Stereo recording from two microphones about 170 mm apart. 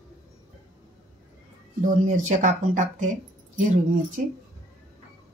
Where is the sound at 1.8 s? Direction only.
50° right (ahead or behind).